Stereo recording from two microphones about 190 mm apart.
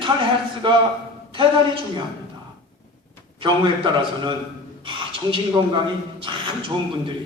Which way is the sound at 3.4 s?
25° right (ahead or behind).